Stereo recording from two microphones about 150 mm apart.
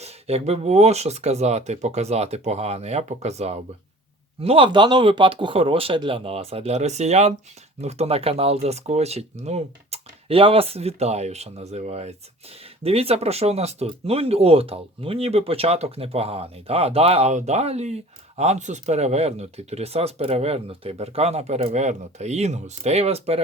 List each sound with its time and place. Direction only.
0.0 s speech: 45° right (ahead or behind)